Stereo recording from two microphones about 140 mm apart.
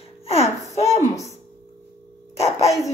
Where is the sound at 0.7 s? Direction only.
50° left (ahead or behind).